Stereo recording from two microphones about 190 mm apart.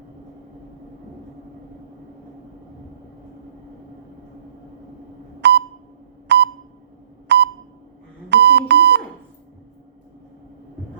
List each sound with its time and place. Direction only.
5.4 s beep: 65° right (ahead or behind)
8.3 s alarm clock: 65° right (ahead or behind)